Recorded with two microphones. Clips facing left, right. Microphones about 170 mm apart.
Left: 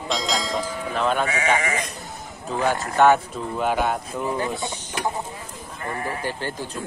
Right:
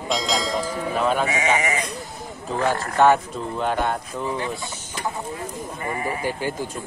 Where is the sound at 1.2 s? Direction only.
15° right (ahead or behind).